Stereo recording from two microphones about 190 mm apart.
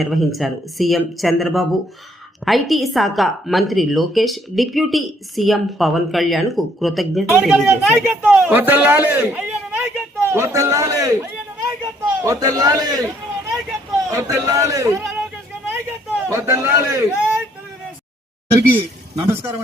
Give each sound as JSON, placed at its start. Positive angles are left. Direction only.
{"t": 0.0, "sound": "a woman's voice", "side_deg": 0}
{"t": 14.1, "sound": "a man's voice", "side_deg": -15}
{"t": 16.3, "sound": "a man's voice", "side_deg": -15}
{"t": 18.5, "sound": "a man's voice", "side_deg": -15}